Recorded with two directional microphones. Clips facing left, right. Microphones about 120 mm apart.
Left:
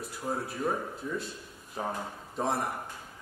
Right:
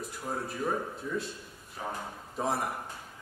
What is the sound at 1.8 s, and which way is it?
Speech, 30° left (ahead or behind).